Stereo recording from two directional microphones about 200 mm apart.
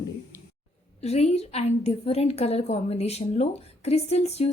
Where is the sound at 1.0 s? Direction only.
30° left (ahead or behind).